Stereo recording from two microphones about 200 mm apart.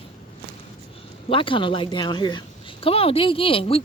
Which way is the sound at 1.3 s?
25° left (ahead or behind).